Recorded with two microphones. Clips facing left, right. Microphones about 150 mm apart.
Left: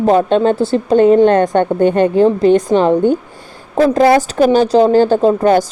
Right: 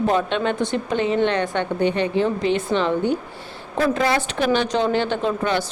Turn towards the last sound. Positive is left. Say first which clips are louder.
# left 11 dB
turn(degrees=40)  # may be behind; listen again after turning